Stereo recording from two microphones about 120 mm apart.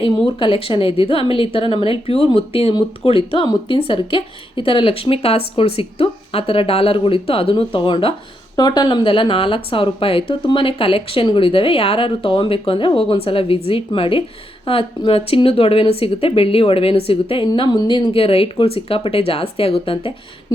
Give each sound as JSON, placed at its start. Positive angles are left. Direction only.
{"t": 0.3, "sound": "speech", "side_deg": 45}
{"t": 8.5, "sound": "speech", "side_deg": 35}